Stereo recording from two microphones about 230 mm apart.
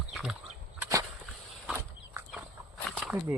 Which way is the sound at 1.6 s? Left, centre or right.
Centre.